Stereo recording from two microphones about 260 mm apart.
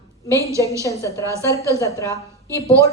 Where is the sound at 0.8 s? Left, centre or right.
Centre.